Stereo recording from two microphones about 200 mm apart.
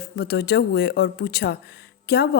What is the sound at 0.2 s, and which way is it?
A woman's voice, 50° left (ahead or behind).